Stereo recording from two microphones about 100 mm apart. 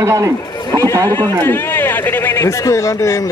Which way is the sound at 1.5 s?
20° left (ahead or behind).